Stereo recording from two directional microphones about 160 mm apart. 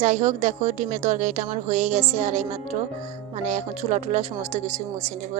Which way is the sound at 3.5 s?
50° right (ahead or behind).